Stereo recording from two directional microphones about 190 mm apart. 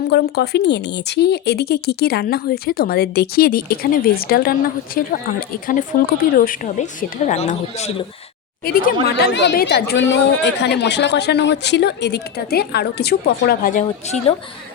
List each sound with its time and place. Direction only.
0.1 s a woman's voice: 60° left (ahead or behind); by 7.9 s 40° left (ahead or behind)
8.6 s speech: 50° left (ahead or behind)